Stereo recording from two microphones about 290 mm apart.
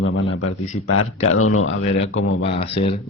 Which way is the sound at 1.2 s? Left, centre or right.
Left.